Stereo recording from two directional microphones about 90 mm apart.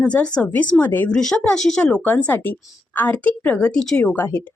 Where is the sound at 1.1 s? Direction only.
5° left (ahead or behind).